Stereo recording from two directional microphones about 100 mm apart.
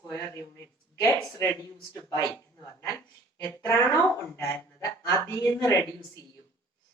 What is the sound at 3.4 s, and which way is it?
Speech, 25° left (ahead or behind).